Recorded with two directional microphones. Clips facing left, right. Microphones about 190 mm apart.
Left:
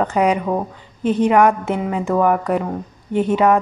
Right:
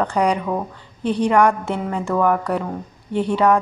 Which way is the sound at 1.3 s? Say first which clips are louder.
Left 1 dB; 15° left (ahead or behind).